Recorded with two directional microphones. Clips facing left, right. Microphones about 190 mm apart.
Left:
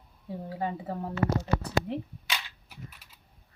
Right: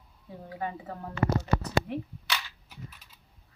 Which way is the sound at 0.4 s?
30° left (ahead or behind).